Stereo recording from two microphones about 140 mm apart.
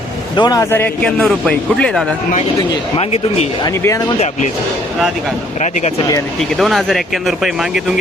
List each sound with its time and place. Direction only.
0.3 s speech: 30° left (ahead or behind)
0.7 s a man's voice: 10° left (ahead or behind)
2.6 s speech: 45° left (ahead or behind)
3.6 s speech: 25° left (ahead or behind)
4.2 s speech: 55° left (ahead or behind)
5.5 s speech: 55° left (ahead or behind)
6.6 s speech: centre (ahead or behind)